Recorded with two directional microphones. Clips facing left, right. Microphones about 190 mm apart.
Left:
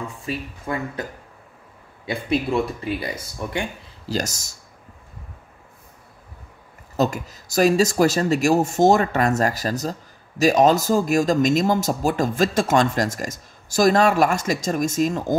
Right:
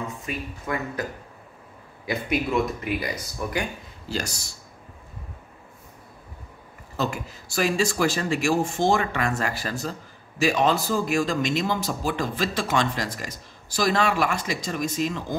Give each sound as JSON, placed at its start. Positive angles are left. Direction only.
{"t": 0.3, "sound": "speech", "side_deg": 30}
{"t": 2.0, "sound": "speech", "side_deg": 30}
{"t": 4.1, "sound": "speech", "side_deg": 45}
{"t": 7.0, "sound": "speech", "side_deg": 40}